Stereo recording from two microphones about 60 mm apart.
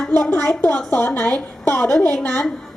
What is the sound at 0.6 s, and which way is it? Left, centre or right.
A woman's voice, left.